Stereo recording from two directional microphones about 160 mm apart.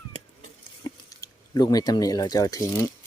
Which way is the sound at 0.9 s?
25° left (ahead or behind).